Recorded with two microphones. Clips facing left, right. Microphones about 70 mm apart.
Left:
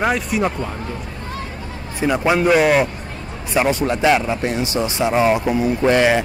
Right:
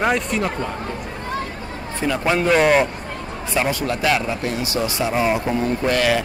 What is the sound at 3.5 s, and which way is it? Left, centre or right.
Speech, left.